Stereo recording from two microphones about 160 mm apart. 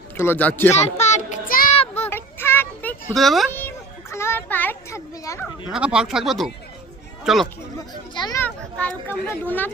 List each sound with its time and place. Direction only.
0.2 s speech: 10° left (ahead or behind)
0.7 s a sound: 45° left (ahead or behind)
1.7 s child singing: 40° left (ahead or behind)
2.0 s child singing: 15° left (ahead or behind)
3.2 s speech: centre (ahead or behind)
4.1 s children playing: 15° left (ahead or behind)
5.7 s speech: 5° right (ahead or behind)
8.1 s children playing: 25° left (ahead or behind)
8.4 s speech: 10° left (ahead or behind)